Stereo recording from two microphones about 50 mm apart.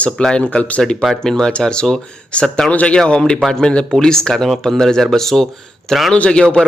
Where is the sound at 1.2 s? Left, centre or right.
Centre.